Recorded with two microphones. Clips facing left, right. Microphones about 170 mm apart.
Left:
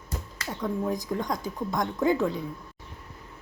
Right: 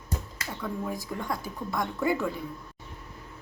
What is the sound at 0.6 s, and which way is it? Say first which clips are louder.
Speech: left 5 dB; 15° left (ahead or behind).